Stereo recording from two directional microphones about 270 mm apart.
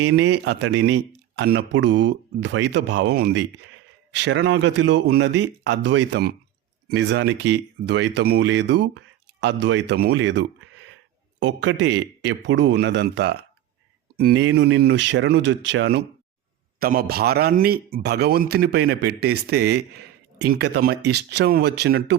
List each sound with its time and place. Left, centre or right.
0.1 s speech: right